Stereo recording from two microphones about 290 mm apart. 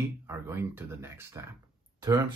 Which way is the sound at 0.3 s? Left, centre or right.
Centre.